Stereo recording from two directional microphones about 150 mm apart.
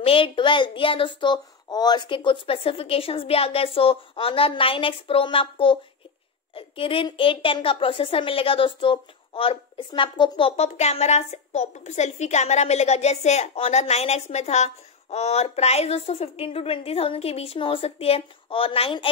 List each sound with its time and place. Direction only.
0.0 s a woman's voice: 35° left (ahead or behind)